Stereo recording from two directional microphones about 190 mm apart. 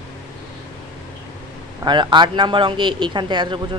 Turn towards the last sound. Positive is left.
turn(degrees=-25)  # may be behind; listen again after turning